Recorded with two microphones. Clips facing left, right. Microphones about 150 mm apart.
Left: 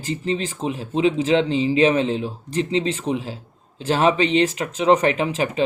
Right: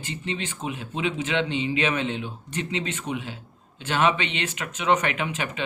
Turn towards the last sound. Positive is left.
turn(degrees=35)  # may be behind; listen again after turning